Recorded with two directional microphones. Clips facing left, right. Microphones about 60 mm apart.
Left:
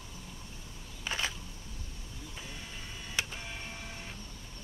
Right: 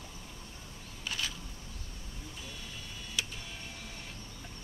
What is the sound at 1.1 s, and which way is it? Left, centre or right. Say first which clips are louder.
Camera: left 3 dB; left.